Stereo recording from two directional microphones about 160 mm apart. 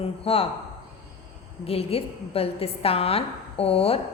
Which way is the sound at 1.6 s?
35° left (ahead or behind).